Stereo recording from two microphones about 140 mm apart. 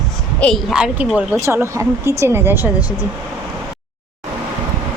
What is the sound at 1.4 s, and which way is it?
Speech, 20° right (ahead or behind).